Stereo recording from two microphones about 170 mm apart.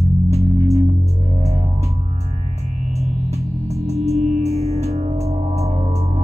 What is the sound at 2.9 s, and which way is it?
Music, 40° right (ahead or behind).